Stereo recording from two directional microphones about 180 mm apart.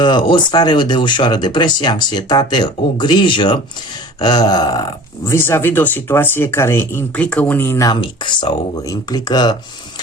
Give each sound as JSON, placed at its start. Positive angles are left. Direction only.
{"t": 0.0, "sound": "speech", "side_deg": 25}
{"t": 8.0, "sound": "speech", "side_deg": 25}